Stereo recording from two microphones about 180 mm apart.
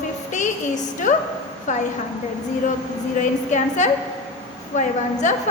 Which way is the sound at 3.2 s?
40° left (ahead or behind).